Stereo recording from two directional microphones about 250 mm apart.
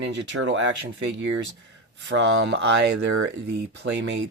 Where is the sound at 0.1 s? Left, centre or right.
Right.